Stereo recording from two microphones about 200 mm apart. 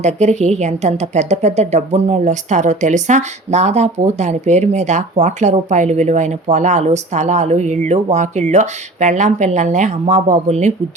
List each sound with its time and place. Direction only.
0.0 s a woman's voice: 35° right (ahead or behind)